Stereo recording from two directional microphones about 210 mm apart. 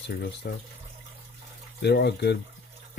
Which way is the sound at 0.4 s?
55° left (ahead or behind).